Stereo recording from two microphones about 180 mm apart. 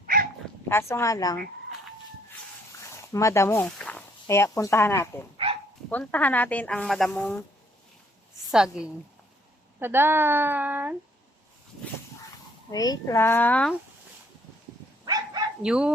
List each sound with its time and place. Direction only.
0.0 s dog: 50° right (ahead or behind)
0.7 s speech: 15° left (ahead or behind)
3.1 s speech: 15° left (ahead or behind)
8.4 s a woman's voice: 5° right (ahead or behind)
12.7 s speech: 20° left (ahead or behind)
15.0 s dog: 20° right (ahead or behind)
15.6 s a woman's voice: 5° right (ahead or behind)